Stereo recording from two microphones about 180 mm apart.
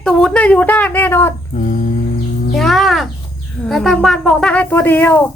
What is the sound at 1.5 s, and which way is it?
Humming, 45° left (ahead or behind).